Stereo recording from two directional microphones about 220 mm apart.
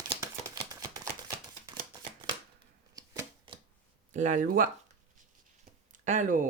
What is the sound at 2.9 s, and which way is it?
Shuffling cards, 15° right (ahead or behind).